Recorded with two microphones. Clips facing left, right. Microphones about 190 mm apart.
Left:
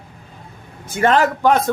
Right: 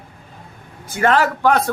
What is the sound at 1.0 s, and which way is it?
Speech, 20° left (ahead or behind).